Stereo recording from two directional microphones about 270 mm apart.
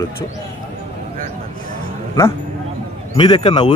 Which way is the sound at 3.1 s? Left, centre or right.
Centre.